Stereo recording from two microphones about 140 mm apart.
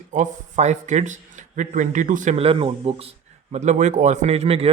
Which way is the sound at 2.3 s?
45° right (ahead or behind).